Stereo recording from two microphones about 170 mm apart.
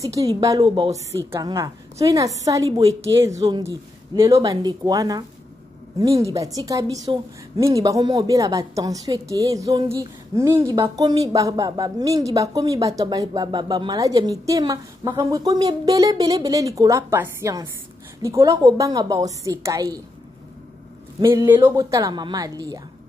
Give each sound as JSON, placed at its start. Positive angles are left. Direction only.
{"t": 0.0, "sound": "a woman's voice", "side_deg": -20}
{"t": 21.2, "sound": "a woman's voice", "side_deg": -15}